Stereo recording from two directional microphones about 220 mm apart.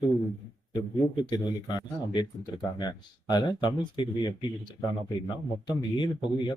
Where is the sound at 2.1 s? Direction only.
20° left (ahead or behind).